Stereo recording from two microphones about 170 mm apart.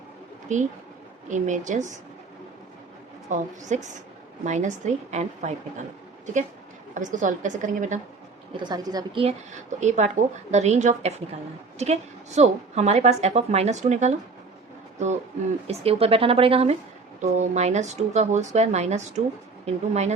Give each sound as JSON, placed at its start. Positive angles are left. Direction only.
{"t": 0.4, "sound": "speech", "side_deg": -45}
{"t": 3.2, "sound": "speech", "side_deg": -45}
{"t": 6.9, "sound": "speech", "side_deg": -50}
{"t": 8.6, "sound": "a woman's voice", "side_deg": -25}
{"t": 9.2, "sound": "a woman's voice", "side_deg": -45}
{"t": 15.6, "sound": "a woman's voice", "side_deg": -35}